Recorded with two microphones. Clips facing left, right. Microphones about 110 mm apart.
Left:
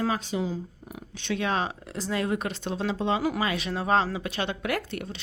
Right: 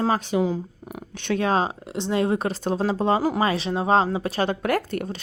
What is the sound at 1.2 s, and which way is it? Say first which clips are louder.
Speech: right 6 dB; 45° right (ahead or behind).